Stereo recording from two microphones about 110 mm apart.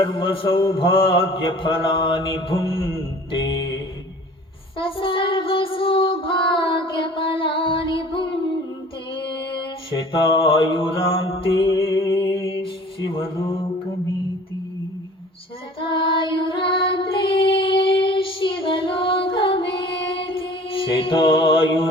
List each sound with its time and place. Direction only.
0.0 s a man's voice: 55° left (ahead or behind)
3.3 s music: 50° left (ahead or behind)
4.8 s child singing: 55° left (ahead or behind)
9.1 s mantra: 50° left (ahead or behind)
11.9 s a sound: 30° left (ahead or behind)
12.5 s mantra: 50° left (ahead or behind)
15.9 s music: 50° left (ahead or behind)